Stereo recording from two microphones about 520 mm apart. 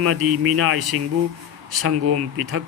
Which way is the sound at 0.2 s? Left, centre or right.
Right.